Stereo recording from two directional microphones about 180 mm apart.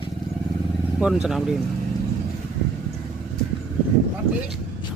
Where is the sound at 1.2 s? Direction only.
Centre (ahead or behind).